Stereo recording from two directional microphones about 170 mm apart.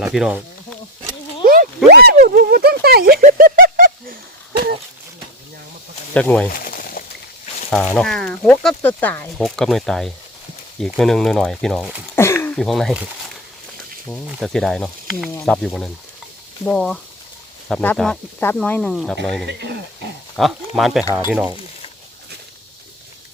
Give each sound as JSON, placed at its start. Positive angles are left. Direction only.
{"t": 0.0, "sound": "snake", "side_deg": -5}
{"t": 1.5, "sound": "a sound", "side_deg": -65}
{"t": 6.1, "sound": "speech", "side_deg": 10}
{"t": 6.5, "sound": "a sound", "side_deg": 55}
{"t": 7.7, "sound": "speech", "side_deg": 5}
{"t": 9.4, "sound": "speech", "side_deg": 0}
{"t": 12.1, "sound": "a sound", "side_deg": 15}
{"t": 12.5, "sound": "speech", "side_deg": 0}
{"t": 14.3, "sound": "speech", "side_deg": 0}
{"t": 19.5, "sound": "speech", "side_deg": -80}
{"t": 20.3, "sound": "speech", "side_deg": 0}
{"t": 21.0, "sound": "speech", "side_deg": 20}